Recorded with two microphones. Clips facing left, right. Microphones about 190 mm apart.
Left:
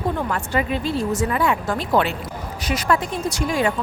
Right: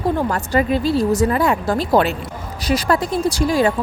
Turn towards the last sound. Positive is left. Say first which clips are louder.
# right 5 dB
turn(degrees=-35)  # may be behind; listen again after turning